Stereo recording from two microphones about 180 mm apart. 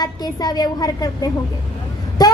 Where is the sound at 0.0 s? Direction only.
20° left (ahead or behind).